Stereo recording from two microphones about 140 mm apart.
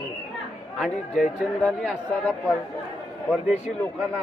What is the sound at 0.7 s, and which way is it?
Speech, 5° left (ahead or behind).